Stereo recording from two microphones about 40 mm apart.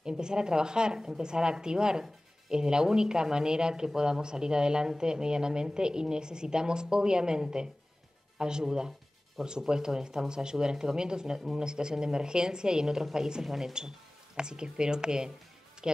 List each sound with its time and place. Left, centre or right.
0.0 s speech: centre
13.7 s speech: centre
15.8 s music: centre